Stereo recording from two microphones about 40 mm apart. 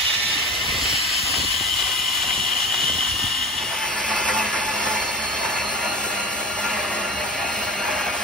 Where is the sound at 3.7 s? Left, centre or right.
Left.